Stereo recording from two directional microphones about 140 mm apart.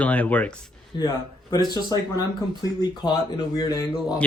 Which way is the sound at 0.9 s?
30° left (ahead or behind).